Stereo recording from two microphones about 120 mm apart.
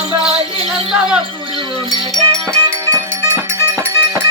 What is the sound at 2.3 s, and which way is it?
Music, 5° left (ahead or behind).